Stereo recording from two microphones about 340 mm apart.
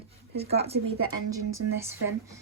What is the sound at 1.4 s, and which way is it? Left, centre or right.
Speech, right.